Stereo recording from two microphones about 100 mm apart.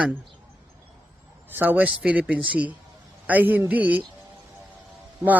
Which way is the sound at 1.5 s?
15° right (ahead or behind).